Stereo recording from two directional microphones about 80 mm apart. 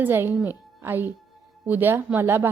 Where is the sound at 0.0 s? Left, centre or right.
Right.